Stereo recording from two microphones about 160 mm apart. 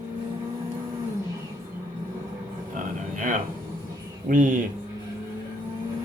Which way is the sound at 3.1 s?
55° right (ahead or behind).